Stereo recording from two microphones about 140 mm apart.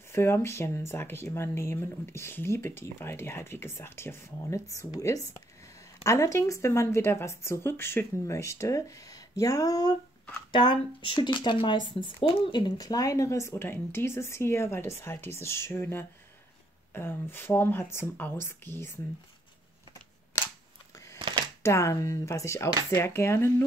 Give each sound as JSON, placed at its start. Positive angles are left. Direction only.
{"t": 0.1, "sound": "speech", "side_deg": 15}
{"t": 20.9, "sound": "a sound", "side_deg": 20}
{"t": 21.6, "sound": "speech", "side_deg": 20}